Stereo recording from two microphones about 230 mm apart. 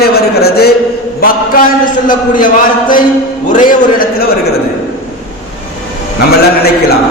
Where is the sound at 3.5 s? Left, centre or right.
Left.